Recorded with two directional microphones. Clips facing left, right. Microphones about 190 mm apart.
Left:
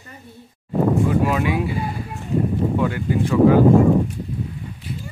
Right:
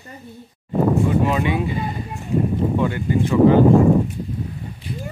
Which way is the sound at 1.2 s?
5° left (ahead or behind).